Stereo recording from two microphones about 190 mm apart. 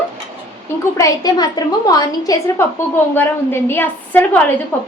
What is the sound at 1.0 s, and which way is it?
A woman's voice, 20° left (ahead or behind).